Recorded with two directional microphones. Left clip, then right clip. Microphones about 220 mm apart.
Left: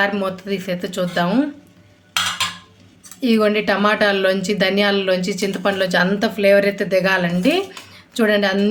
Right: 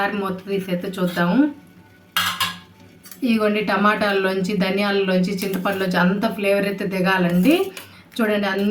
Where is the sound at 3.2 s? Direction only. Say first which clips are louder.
Left 4 dB; 45° left (ahead or behind).